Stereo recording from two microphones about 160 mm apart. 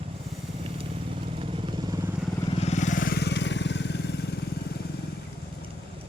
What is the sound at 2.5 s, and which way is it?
Vehicle, 45° left (ahead or behind).